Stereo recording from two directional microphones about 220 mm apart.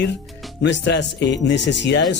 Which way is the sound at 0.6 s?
55° left (ahead or behind).